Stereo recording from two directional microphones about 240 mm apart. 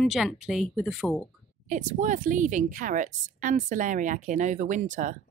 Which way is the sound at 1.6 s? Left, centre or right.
Right.